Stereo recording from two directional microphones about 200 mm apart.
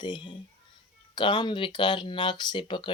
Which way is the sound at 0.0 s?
25° left (ahead or behind).